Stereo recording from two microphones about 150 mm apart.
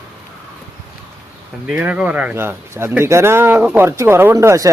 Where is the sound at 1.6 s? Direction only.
10° right (ahead or behind).